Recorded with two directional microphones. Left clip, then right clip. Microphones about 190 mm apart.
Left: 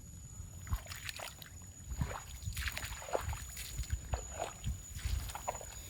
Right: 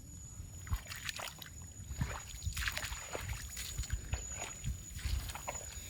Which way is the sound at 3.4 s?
Centre (ahead or behind).